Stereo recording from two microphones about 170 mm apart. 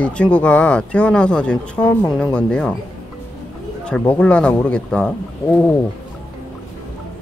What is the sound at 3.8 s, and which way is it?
Speech, 5° left (ahead or behind).